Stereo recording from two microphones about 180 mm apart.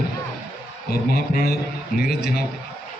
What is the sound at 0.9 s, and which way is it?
A man's voice, 55° left (ahead or behind).